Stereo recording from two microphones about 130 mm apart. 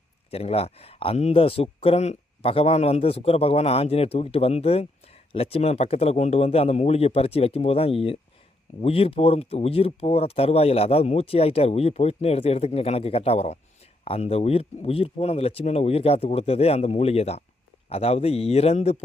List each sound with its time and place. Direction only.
0.3 s speech: 50° left (ahead or behind)